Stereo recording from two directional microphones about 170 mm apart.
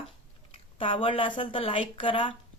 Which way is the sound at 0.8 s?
30° left (ahead or behind).